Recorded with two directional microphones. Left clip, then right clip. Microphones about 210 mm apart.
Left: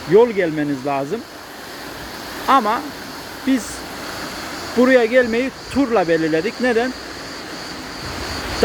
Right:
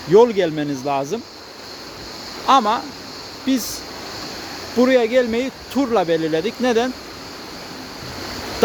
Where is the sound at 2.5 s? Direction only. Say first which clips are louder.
Even; 15° right (ahead or behind).